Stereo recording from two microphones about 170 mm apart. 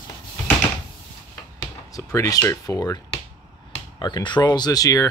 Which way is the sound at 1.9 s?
20° left (ahead or behind).